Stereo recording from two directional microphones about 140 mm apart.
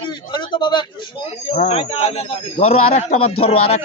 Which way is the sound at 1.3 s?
50° left (ahead or behind).